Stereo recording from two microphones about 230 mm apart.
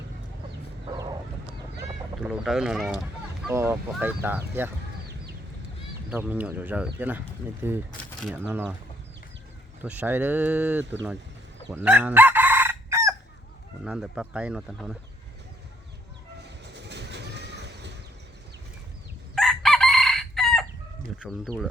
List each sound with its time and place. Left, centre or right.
2.2 s speech: centre
6.1 s speech: centre
9.8 s speech: centre
11.7 s chicken: centre
13.8 s speech: centre
16.7 s a sound: right
19.4 s chicken: centre
21.2 s speech: centre